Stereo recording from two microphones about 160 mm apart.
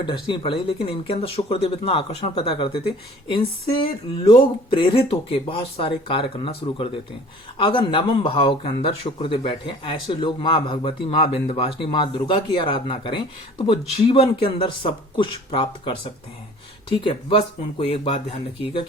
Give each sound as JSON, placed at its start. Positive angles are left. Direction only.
{"t": 0.0, "sound": "speech", "side_deg": 30}